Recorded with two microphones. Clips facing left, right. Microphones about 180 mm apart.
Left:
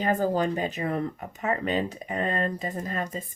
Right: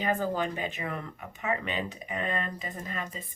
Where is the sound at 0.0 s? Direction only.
40° left (ahead or behind).